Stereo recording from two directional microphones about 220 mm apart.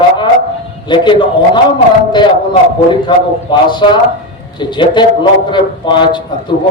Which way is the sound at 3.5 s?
20° left (ahead or behind).